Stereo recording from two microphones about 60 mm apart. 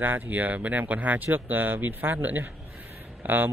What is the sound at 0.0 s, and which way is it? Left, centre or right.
A man's voice, right.